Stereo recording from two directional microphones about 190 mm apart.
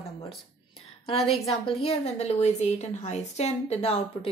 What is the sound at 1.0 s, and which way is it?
A woman's voice, 30° left (ahead or behind).